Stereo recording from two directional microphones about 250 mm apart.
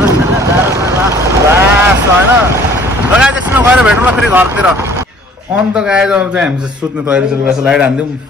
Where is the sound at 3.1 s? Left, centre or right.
Centre.